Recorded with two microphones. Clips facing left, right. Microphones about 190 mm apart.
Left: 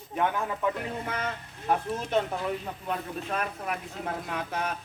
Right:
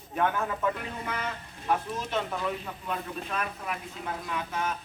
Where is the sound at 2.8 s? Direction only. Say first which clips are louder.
Left 1 dB; 40° left (ahead or behind).